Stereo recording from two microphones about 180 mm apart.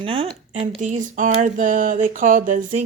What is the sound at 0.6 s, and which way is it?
Speech, 45° right (ahead or behind).